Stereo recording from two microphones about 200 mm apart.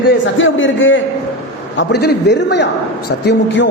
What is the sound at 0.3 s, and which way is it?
Speech, 70° left (ahead or behind).